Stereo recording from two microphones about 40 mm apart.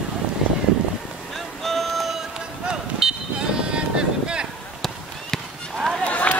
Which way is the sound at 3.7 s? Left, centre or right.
Right.